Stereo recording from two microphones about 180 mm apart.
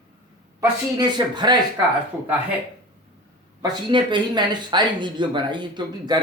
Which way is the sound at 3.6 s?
25° right (ahead or behind).